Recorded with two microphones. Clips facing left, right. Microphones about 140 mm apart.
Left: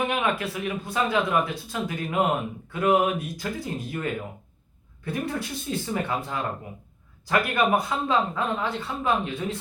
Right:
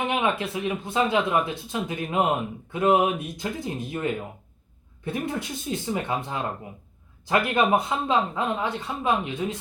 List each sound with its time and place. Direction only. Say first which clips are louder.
0.1 s speech: right 1 dB; 20° right (ahead or behind)